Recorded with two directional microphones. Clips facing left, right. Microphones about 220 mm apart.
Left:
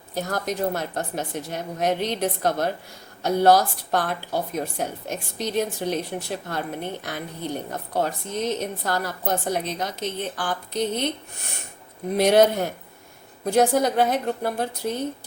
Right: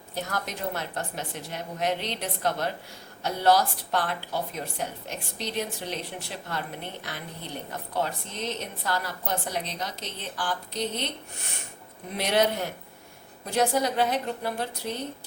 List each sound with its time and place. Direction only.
0.1 s speech: 40° left (ahead or behind)
12.1 s speech: 45° left (ahead or behind)